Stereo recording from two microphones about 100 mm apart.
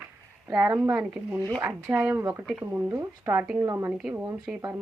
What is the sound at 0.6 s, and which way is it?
A woman's voice, 20° right (ahead or behind).